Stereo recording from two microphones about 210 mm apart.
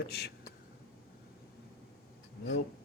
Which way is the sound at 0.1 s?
50° left (ahead or behind).